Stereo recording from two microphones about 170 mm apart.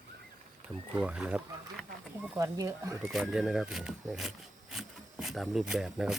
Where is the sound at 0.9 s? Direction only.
5° right (ahead or behind).